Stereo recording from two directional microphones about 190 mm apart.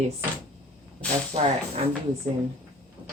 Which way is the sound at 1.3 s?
30° right (ahead or behind).